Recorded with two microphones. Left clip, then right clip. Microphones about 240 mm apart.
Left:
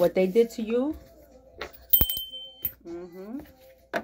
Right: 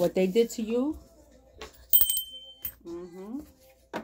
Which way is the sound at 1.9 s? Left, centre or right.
Centre.